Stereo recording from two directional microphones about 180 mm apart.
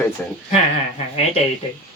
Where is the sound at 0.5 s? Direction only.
35° left (ahead or behind).